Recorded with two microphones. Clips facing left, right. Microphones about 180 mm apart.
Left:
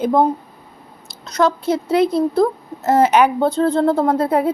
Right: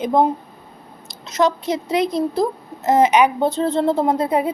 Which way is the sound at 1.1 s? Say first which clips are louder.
Left 1 dB; 20° right (ahead or behind).